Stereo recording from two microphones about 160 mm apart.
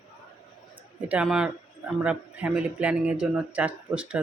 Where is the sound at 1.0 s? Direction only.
5° right (ahead or behind).